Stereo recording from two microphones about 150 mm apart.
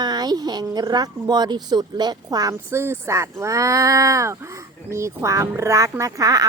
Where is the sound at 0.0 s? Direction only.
25° right (ahead or behind).